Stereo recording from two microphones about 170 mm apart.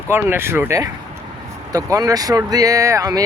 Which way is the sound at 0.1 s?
15° right (ahead or behind).